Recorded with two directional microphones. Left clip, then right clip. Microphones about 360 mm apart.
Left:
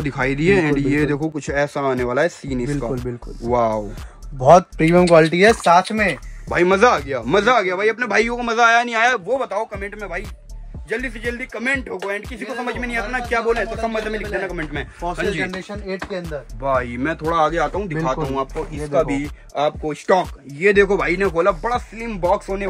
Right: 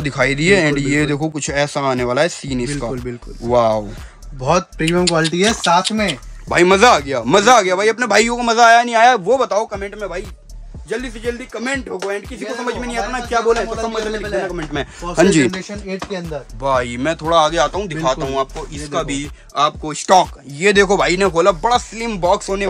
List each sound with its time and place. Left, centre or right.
0.0 s speech: centre
4.5 s speech: centre
5.6 s speech: centre
14.8 s speech: centre
16.3 s speech: centre